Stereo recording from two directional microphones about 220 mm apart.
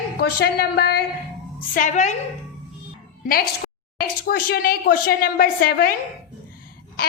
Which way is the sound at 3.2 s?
40° left (ahead or behind).